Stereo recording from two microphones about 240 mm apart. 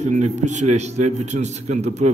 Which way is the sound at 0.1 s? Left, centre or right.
Right.